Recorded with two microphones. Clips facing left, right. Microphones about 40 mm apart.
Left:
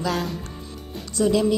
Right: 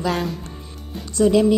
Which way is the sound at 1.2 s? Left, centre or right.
Right.